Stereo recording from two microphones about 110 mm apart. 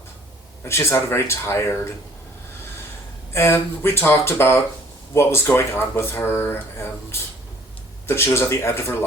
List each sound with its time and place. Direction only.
0.6 s speech: 25° left (ahead or behind)
3.3 s speech: 20° left (ahead or behind)